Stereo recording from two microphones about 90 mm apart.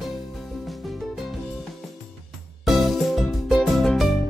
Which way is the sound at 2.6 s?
Centre (ahead or behind).